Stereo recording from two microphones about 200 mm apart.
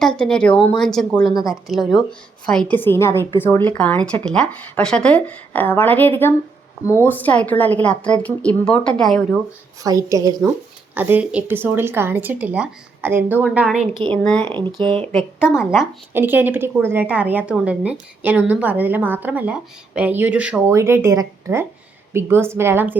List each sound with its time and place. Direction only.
0.0 s speech: 5° left (ahead or behind)
0.5 s speech: 25° left (ahead or behind)
0.8 s a woman's voice: 5° left (ahead or behind)
9.8 s a woman's voice: 15° right (ahead or behind)